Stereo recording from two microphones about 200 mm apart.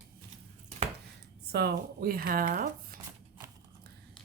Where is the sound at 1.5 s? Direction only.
55° right (ahead or behind).